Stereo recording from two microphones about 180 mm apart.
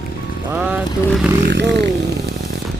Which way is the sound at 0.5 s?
10° right (ahead or behind).